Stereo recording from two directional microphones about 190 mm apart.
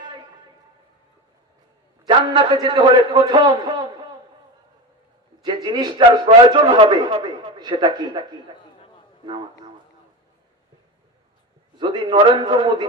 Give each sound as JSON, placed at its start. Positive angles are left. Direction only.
{"t": 2.0, "sound": "a man's voice", "side_deg": -20}
{"t": 5.4, "sound": "a man's voice", "side_deg": -25}
{"t": 11.8, "sound": "a man's voice", "side_deg": -25}